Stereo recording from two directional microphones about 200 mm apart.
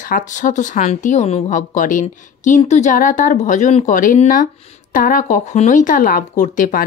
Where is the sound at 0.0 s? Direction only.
40° left (ahead or behind).